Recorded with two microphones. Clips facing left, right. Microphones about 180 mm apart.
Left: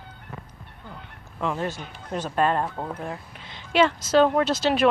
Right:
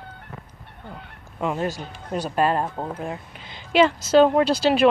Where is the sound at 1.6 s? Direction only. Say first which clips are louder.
Right 3 dB; 40° right (ahead or behind).